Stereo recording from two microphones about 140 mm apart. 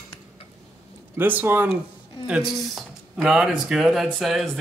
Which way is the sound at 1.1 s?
15° right (ahead or behind).